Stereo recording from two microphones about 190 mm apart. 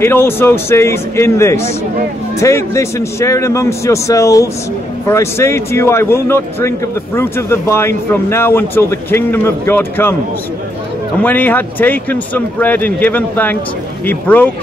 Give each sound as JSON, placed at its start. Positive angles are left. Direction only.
{"t": 0.0, "sound": "speech", "side_deg": 10}
{"t": 11.2, "sound": "speech", "side_deg": 10}